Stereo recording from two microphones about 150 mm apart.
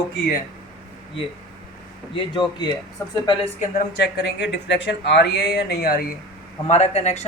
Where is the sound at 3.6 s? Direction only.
70° left (ahead or behind).